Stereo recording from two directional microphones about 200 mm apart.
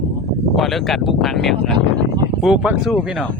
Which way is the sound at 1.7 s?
25° right (ahead or behind).